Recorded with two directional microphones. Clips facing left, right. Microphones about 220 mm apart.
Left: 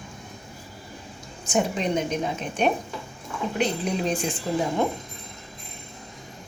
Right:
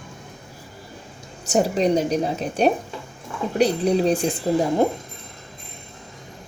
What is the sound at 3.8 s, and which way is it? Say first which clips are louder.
Speech: right 7 dB; 35° right (ahead or behind).